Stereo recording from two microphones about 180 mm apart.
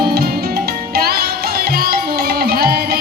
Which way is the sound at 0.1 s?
60° right (ahead or behind).